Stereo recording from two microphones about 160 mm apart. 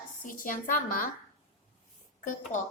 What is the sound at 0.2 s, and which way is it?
Speech, 55° left (ahead or behind).